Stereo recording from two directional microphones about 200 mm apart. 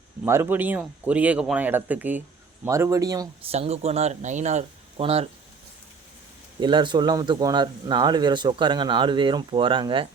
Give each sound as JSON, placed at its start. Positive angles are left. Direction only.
{"t": 0.3, "sound": "speech", "side_deg": -10}
{"t": 3.5, "sound": "speech", "side_deg": -30}
{"t": 6.6, "sound": "speech", "side_deg": -25}